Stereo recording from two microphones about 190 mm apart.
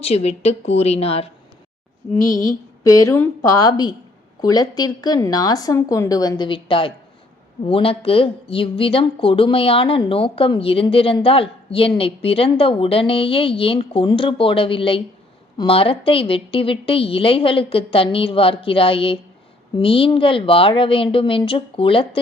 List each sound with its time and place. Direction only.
0.0 s a woman's voice: 35° left (ahead or behind)
2.2 s a woman's voice: 15° left (ahead or behind)